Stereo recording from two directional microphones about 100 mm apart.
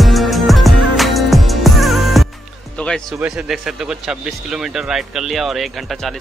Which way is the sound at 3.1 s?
10° right (ahead or behind).